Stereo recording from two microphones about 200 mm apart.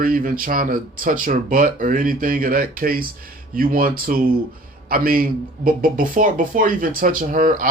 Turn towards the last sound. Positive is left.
turn(degrees=-45)  # may be behind; listen again after turning